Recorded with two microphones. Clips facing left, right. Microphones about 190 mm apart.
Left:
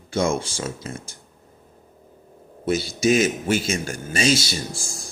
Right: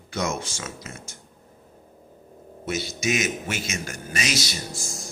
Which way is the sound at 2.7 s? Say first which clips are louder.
Left 7 dB; 30° left (ahead or behind).